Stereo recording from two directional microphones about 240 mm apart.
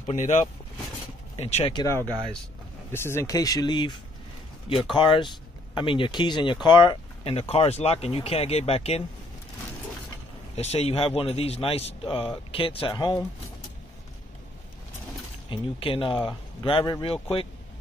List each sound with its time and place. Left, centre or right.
0.0 s speech: left; by 2.0 s centre
2.0 s speech: centre
2.9 s speech: centre
10.5 s speech: left
15.5 s speech: left